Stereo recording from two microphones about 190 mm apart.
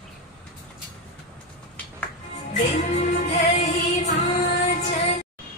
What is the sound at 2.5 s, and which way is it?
Music, 40° left (ahead or behind).